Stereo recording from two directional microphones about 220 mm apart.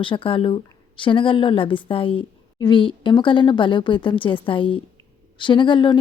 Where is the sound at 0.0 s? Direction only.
25° left (ahead or behind).